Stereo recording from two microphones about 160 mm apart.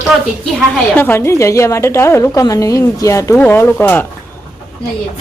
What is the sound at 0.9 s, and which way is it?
A woman's voice, 15° left (ahead or behind).